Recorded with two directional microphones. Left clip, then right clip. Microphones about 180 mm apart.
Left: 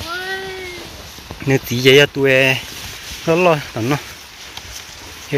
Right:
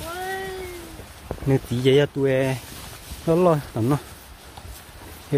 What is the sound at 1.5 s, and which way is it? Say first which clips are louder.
Speech: left 8 dB; centre (ahead or behind).